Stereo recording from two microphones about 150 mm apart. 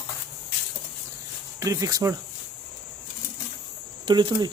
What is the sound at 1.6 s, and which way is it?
Speech, 20° right (ahead or behind).